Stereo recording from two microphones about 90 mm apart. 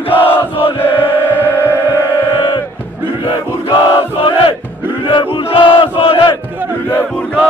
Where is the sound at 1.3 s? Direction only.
25° left (ahead or behind).